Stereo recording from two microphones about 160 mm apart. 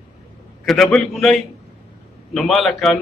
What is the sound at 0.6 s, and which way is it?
A man's voice, centre (ahead or behind).